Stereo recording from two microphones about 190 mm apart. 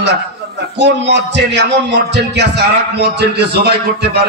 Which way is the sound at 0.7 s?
65° right (ahead or behind).